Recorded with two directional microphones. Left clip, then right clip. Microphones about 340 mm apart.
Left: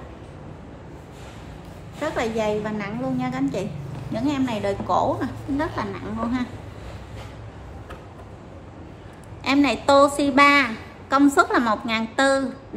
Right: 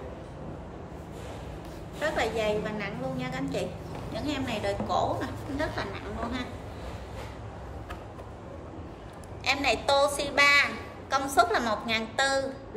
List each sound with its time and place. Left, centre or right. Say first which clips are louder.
2.0 s a woman's voice: left 4 dB; centre
9.4 s a woman's voice: left 5 dB; centre